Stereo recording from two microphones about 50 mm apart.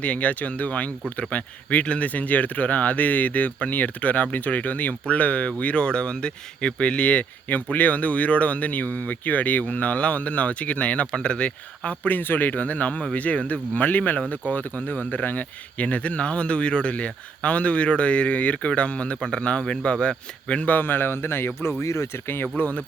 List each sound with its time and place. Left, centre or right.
0.0 s speech: left
20.7 s speech: left
21.8 s speech: left
22.5 s speech: left